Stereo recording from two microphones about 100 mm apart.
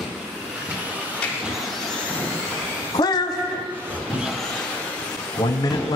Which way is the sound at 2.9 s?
45° left (ahead or behind).